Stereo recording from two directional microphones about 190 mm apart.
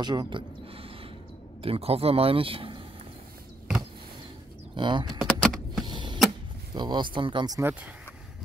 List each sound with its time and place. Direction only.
0.0 s speech: 20° right (ahead or behind)
4.7 s speech: 25° right (ahead or behind)
5.2 s power windows: centre (ahead or behind)
5.9 s a sound: 25° right (ahead or behind)
6.7 s speech: 25° right (ahead or behind)